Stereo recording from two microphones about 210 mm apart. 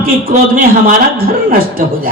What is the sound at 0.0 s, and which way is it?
Speech, 40° right (ahead or behind).